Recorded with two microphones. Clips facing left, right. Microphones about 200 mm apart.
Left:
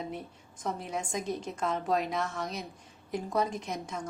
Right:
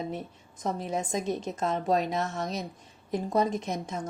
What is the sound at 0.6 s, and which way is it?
A woman's voice, 20° right (ahead or behind).